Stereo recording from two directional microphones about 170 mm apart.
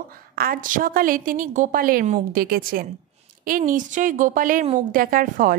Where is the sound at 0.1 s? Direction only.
60° right (ahead or behind).